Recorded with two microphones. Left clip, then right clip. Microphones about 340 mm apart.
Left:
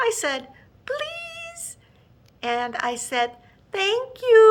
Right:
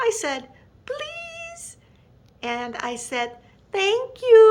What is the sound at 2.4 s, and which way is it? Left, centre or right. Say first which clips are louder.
A child's voice: left 3 dB; centre.